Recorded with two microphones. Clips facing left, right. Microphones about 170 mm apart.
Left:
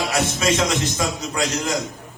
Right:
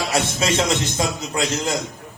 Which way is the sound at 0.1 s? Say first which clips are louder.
Even; 30° right (ahead or behind).